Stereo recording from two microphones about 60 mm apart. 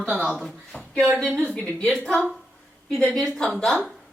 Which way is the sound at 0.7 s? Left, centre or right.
Left.